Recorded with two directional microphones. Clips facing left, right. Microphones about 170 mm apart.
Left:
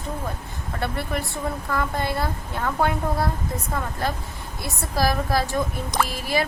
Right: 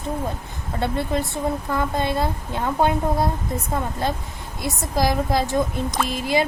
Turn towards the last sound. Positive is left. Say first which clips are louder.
# right 2 dB
turn(degrees=-20)  # may be behind; listen again after turning